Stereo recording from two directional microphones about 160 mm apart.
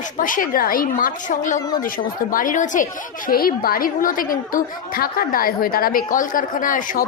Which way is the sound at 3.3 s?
65° left (ahead or behind).